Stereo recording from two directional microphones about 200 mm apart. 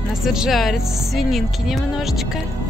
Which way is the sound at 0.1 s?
Centre (ahead or behind).